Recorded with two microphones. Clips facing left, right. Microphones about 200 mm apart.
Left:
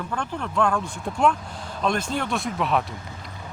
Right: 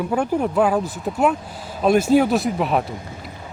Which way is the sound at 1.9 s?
5° right (ahead or behind).